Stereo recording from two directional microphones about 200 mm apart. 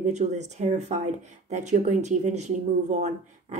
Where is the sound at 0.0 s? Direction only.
35° right (ahead or behind).